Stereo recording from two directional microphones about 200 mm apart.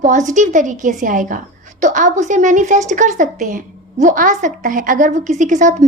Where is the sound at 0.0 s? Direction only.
40° right (ahead or behind).